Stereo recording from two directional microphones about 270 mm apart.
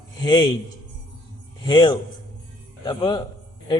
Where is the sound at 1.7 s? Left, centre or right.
Centre.